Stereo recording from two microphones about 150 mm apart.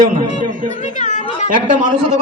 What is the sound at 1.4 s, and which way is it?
Speech, 60° right (ahead or behind).